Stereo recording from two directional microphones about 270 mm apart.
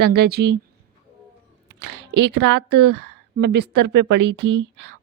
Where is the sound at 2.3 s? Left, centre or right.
Right.